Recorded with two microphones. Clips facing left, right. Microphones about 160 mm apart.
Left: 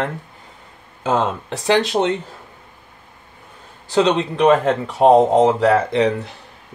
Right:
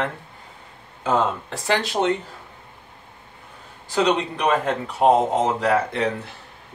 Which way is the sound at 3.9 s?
25° left (ahead or behind).